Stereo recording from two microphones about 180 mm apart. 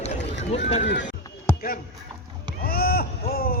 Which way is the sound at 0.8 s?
80° left.